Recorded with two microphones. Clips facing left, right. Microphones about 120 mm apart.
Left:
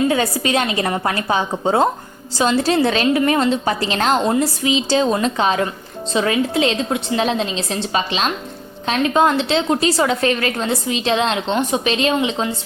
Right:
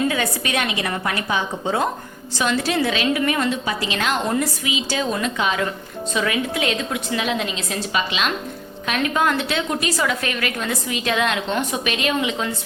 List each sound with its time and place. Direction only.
0.1 s a woman's voice: 30° left (ahead or behind)
0.7 s a woman's voice: 40° left (ahead or behind)
2.4 s a woman's voice: 30° left (ahead or behind)
2.8 s a woman's voice: 40° left (ahead or behind)
3.7 s a woman's voice: 40° left (ahead or behind)
4.3 s a woman's voice: 30° left (ahead or behind)